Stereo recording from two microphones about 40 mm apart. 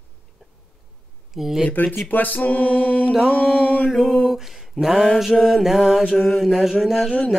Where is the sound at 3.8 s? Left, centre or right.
Centre.